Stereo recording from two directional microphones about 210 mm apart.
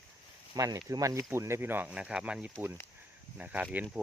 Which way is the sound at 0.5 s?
15° right (ahead or behind).